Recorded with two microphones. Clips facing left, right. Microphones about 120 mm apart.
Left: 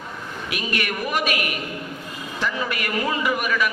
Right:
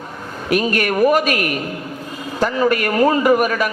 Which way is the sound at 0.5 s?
45° right (ahead or behind).